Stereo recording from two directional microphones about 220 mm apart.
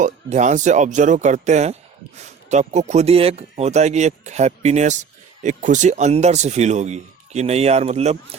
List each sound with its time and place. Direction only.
0.0 s speech: 35° right (ahead or behind)